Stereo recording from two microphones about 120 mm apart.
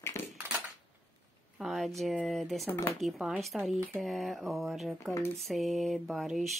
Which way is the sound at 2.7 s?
20° left (ahead or behind).